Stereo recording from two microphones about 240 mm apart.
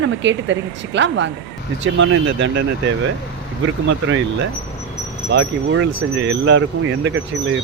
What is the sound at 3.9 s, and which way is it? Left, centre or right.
Speech, right.